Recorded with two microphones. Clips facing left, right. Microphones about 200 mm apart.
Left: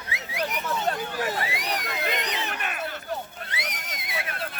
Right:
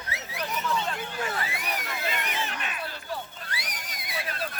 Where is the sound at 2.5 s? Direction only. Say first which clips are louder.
Left 3 dB; 55° left (ahead or behind).